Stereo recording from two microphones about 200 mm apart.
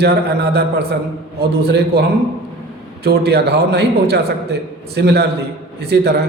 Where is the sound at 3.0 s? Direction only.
55° right (ahead or behind).